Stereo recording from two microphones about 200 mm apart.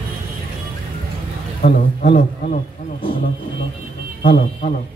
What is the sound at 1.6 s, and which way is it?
Speech, 55° left (ahead or behind).